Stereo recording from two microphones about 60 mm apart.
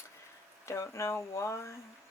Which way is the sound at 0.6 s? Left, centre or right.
Left.